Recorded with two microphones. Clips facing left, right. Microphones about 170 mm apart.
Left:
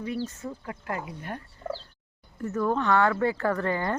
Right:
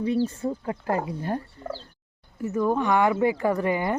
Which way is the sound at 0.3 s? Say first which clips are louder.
Right 8 dB; 30° right (ahead or behind).